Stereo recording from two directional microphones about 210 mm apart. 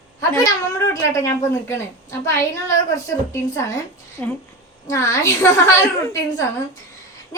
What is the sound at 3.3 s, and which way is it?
A woman's voice, 15° left (ahead or behind).